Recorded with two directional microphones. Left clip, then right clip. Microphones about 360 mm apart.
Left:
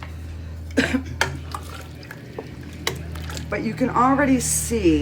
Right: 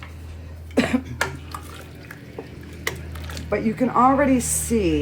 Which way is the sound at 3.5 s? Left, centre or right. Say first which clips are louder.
Right 2 dB; centre.